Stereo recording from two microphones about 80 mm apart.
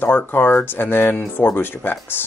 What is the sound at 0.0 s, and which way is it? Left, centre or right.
Speech, left.